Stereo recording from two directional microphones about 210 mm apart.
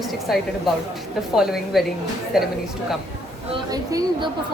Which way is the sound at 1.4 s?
Centre (ahead or behind).